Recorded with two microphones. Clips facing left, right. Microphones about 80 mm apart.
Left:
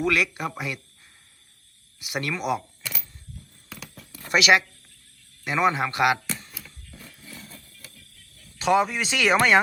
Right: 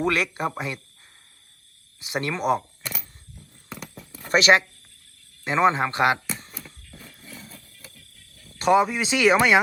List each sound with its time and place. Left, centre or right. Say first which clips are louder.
0.0 s speech: right 1 dB; right
2.0 s speech: right 2 dB; right
2.4 s speech: right 4 dB; right
2.9 s a sound: right 1 dB; centre
4.3 s speech: right 2 dB; right
6.4 s a sound: right 3 dB; right
6.9 s wild animals: even; centre
7.7 s music: right 1 dB; right
8.7 s speech: right 2 dB; centre